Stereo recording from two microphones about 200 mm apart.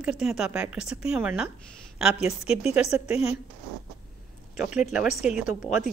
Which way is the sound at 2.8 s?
30° left (ahead or behind).